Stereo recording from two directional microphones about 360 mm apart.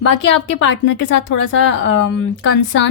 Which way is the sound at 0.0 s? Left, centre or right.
Left.